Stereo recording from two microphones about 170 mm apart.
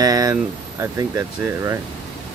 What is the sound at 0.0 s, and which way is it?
Speech, 20° right (ahead or behind).